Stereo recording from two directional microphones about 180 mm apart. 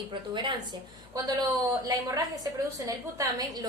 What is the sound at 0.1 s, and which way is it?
Speech, 25° right (ahead or behind).